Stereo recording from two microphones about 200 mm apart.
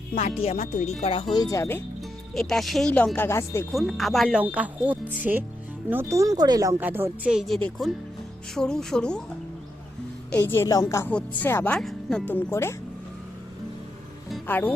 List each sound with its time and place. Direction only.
0.1 s speech: 35° left (ahead or behind); by 1.8 s 15° left (ahead or behind)
2.0 s speech: centre (ahead or behind)
3.7 s speech: centre (ahead or behind)
10.5 s speech: 15° left (ahead or behind)
14.4 s speech: 10° left (ahead or behind)